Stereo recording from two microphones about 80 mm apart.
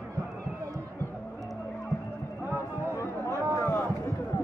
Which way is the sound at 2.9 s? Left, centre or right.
Left.